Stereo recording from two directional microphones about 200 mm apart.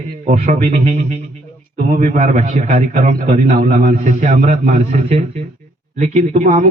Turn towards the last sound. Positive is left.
turn(degrees=-35)  # may be behind; listen again after turning